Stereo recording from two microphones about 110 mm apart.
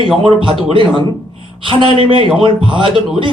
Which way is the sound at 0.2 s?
50° right (ahead or behind).